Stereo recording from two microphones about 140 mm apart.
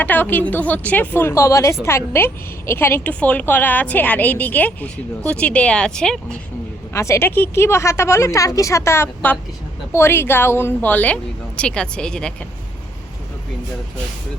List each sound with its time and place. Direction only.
0.0 s a woman's voice: 10° left (ahead or behind)
6.9 s a woman's voice: 20° left (ahead or behind)